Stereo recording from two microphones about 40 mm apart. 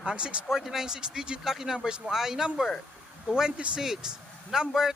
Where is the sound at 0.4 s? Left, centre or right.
Centre.